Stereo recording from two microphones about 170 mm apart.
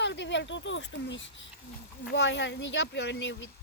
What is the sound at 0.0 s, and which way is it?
Speech, 90° left.